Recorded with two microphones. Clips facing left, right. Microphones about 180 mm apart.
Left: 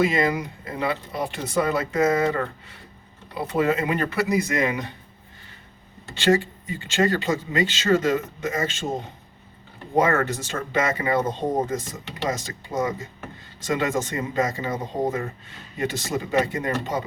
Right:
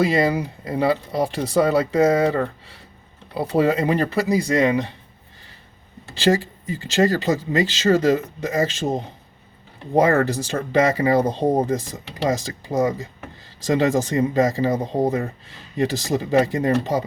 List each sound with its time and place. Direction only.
0.1 s speech: 35° right (ahead or behind)
3.3 s speech: 35° right (ahead or behind)
6.1 s speech: 35° right (ahead or behind)
10.0 s speech: 35° right (ahead or behind)